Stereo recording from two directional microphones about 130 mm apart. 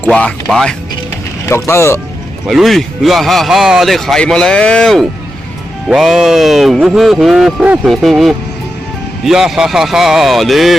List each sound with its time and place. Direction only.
0.0 s speech: 10° left (ahead or behind)
1.5 s speech: 20° left (ahead or behind)
2.5 s speech: centre (ahead or behind)